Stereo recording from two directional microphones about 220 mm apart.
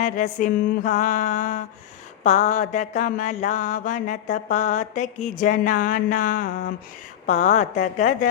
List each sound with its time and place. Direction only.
0.0 s mantra: 35° left (ahead or behind)